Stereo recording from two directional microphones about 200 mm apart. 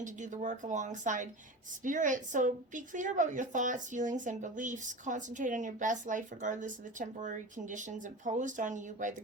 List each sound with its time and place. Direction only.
0.0 s a woman's voice: 40° right (ahead or behind)